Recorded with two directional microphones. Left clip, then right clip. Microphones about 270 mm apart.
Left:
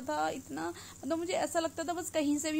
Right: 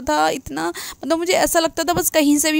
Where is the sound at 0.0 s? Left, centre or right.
Right.